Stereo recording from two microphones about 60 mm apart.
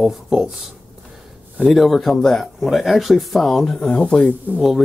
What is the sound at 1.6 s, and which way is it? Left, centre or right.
Speech, centre.